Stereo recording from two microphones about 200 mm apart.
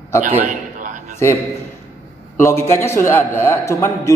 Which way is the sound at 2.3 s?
15° left (ahead or behind).